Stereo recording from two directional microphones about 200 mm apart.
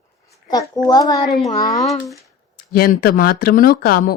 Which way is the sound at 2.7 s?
45° left (ahead or behind).